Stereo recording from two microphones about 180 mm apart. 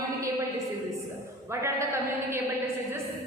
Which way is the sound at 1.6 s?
15° right (ahead or behind).